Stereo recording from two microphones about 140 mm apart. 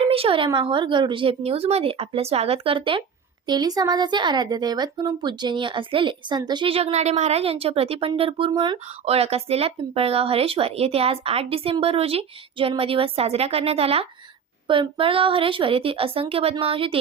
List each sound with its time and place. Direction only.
0.0 s speech: 40° right (ahead or behind)